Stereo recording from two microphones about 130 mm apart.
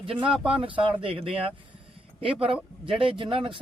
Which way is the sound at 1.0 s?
45° right (ahead or behind).